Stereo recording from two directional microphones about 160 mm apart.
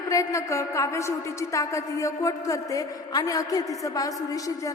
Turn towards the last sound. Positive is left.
turn(degrees=20)  # may be behind; listen again after turning